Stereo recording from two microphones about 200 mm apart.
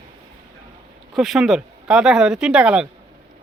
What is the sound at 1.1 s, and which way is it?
Speech, centre (ahead or behind).